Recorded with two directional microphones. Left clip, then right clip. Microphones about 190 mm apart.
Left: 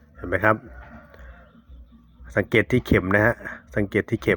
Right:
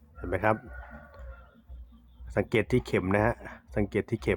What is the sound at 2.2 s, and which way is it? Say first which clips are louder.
A man's voice: left 7 dB; 10° left (ahead or behind).